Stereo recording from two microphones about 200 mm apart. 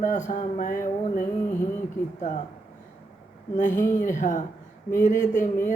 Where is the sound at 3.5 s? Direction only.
40° left (ahead or behind).